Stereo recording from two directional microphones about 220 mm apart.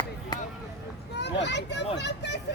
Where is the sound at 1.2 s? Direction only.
50° left (ahead or behind).